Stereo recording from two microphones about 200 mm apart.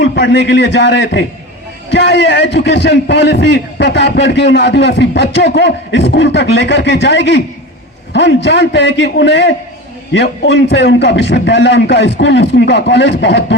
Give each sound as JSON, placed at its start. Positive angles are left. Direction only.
{"t": 0.0, "sound": "a man's voice", "side_deg": 65}